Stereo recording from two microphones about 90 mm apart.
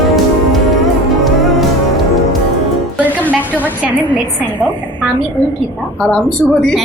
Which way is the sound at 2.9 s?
20° right (ahead or behind).